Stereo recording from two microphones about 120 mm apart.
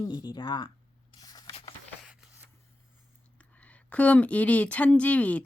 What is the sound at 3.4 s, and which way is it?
Speech, 10° left (ahead or behind).